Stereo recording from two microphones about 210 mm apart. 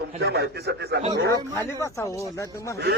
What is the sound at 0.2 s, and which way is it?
Speech, 50° right (ahead or behind).